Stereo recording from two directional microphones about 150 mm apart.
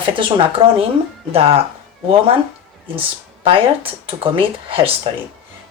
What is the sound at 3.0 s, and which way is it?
Speech, 35° right (ahead or behind).